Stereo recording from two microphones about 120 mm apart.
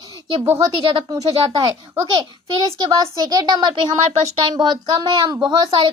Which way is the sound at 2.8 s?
35° right (ahead or behind).